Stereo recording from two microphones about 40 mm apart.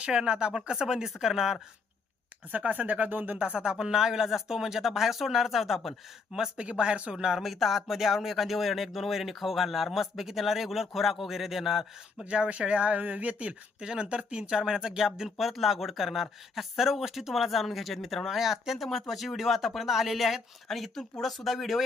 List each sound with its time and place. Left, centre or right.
0.0 s speech: right
2.5 s speech: right
3.3 s speech: right; by 5.9 s centre
6.6 s speech: right
7.3 s speech: centre
12.2 s speech: right
13.5 s speech: centre
14.6 s speech: centre
15.4 s speech: centre
18.8 s speech: centre